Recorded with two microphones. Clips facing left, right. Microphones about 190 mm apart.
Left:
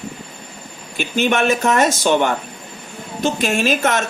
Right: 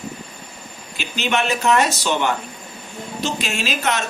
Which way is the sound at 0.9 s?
50° left (ahead or behind).